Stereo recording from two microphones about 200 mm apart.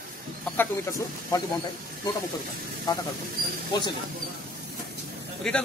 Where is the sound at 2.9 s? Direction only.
20° left (ahead or behind).